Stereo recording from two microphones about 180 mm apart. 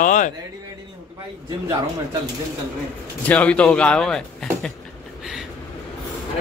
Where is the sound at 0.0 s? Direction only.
45° left (ahead or behind).